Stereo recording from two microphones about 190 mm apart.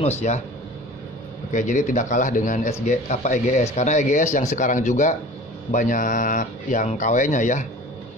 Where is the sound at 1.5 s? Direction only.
40° left (ahead or behind).